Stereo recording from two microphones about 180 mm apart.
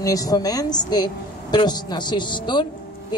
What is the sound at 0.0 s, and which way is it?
Speech, 20° left (ahead or behind).